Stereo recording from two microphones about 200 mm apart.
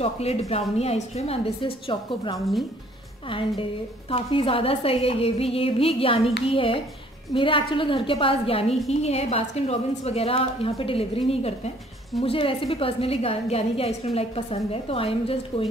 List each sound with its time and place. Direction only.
0.0 s a woman's voice: 30° left (ahead or behind)